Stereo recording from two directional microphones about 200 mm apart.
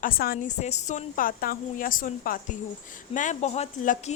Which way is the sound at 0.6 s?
35° left (ahead or behind).